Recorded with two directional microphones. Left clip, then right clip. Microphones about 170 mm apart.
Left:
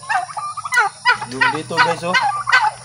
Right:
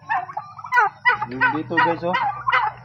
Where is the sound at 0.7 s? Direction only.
20° right (ahead or behind).